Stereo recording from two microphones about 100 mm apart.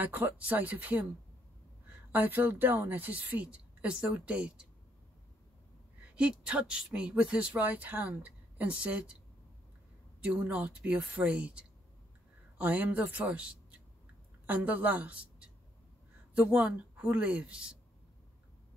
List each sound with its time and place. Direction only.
0.0 s speech: 20° right (ahead or behind)
2.1 s speech: 20° right (ahead or behind)
6.0 s speech: 15° right (ahead or behind)
10.2 s a woman's voice: 15° right (ahead or behind)